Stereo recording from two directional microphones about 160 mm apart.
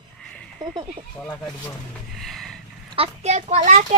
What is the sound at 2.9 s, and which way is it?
A child's voice, 40° right (ahead or behind).